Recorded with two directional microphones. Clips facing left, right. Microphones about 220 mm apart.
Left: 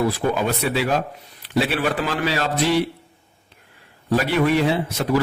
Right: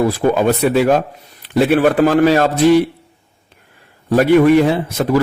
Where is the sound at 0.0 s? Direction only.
50° right (ahead or behind).